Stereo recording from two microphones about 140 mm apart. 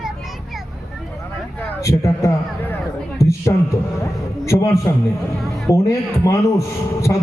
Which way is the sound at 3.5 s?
25° left (ahead or behind).